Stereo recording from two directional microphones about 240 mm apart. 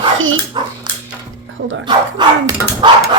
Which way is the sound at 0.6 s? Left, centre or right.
Centre.